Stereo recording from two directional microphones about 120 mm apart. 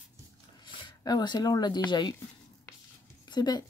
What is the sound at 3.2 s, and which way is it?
Speech, 35° left (ahead or behind).